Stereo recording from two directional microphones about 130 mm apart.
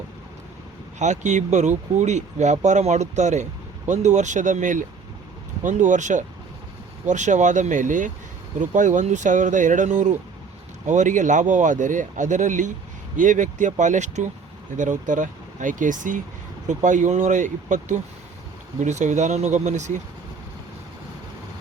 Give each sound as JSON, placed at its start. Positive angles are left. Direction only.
{"t": 0.9, "sound": "speech", "side_deg": -65}
{"t": 14.8, "sound": "speech", "side_deg": -80}
{"t": 16.6, "sound": "speech", "side_deg": -75}